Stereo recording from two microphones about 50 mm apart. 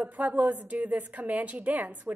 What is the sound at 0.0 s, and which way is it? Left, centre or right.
A woman's voice, right.